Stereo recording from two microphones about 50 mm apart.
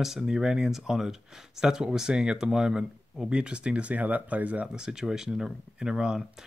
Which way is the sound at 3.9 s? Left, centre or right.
Right.